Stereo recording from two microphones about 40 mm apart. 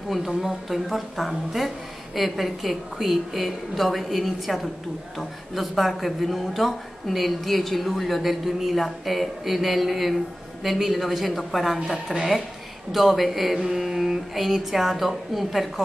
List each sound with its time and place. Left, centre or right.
0.1 s speech: centre